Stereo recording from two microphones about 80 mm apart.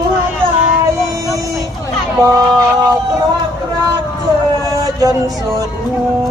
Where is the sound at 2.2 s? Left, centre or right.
Right.